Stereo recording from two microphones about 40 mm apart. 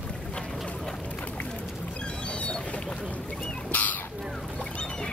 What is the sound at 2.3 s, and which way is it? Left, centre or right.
Boat, left.